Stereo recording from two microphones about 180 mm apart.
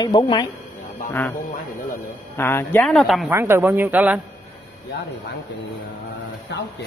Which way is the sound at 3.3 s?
10° right (ahead or behind).